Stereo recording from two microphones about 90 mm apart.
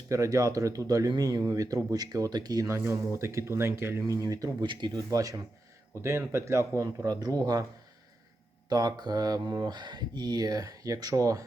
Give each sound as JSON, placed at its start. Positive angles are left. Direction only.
{"t": 0.1, "sound": "speech", "side_deg": -35}
{"t": 2.7, "sound": "speech", "side_deg": -30}
{"t": 4.0, "sound": "speech", "side_deg": -40}
{"t": 4.6, "sound": "speech", "side_deg": -60}
{"t": 4.9, "sound": "speech", "side_deg": -40}
{"t": 5.9, "sound": "speech", "side_deg": -30}
{"t": 8.7, "sound": "speech", "side_deg": -50}